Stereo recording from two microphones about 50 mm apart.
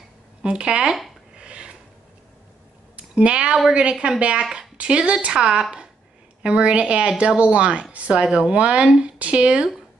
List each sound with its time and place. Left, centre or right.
0.4 s a woman's voice: right
1.4 s a sound: right
3.0 s a woman's voice: right